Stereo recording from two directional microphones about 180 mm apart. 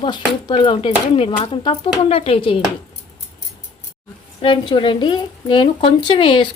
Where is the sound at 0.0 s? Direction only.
25° left (ahead or behind).